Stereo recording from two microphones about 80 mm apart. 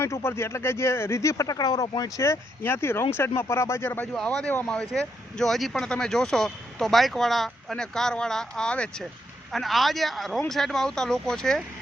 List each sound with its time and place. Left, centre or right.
0.0 s speech: left
2.2 s speech: left
4.0 s speech: centre
4.9 s speech: centre
9.5 s speech: centre